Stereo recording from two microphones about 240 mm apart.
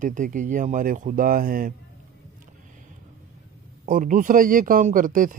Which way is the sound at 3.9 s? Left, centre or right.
Right.